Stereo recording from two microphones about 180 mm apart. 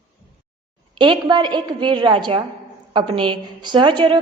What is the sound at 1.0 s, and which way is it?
A woman's voice, 25° right (ahead or behind).